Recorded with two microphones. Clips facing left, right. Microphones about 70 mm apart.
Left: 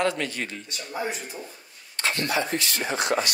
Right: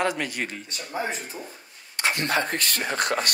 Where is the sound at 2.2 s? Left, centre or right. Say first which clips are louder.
Right 1 dB; right.